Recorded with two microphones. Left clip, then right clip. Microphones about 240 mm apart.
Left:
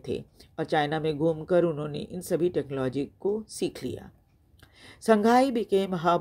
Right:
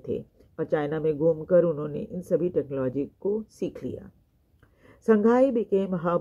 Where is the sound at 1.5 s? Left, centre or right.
Left.